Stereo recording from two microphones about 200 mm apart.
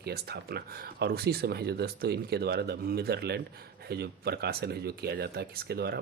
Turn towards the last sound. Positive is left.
turn(degrees=-50)  # may be behind; listen again after turning